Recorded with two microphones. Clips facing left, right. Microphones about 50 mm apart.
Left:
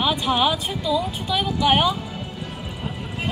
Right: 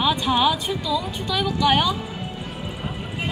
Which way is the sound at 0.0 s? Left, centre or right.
Centre.